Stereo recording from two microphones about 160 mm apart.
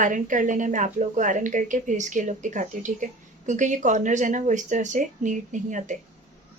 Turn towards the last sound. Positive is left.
turn(degrees=-50)  # may be behind; listen again after turning